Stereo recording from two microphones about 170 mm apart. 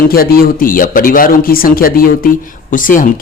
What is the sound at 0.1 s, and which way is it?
Speech, 60° left (ahead or behind).